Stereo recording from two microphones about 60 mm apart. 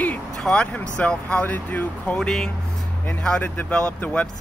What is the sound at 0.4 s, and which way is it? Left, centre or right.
Speech, centre.